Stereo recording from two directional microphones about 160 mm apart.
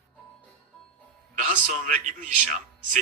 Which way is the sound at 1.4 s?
55° right (ahead or behind).